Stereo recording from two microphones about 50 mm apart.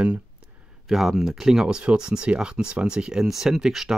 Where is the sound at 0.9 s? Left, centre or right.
Centre.